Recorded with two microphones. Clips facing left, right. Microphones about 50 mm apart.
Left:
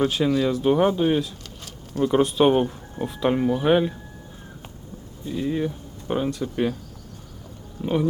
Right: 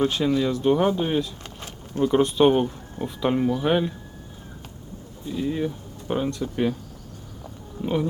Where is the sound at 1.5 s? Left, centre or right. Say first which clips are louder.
Right 2 dB; right.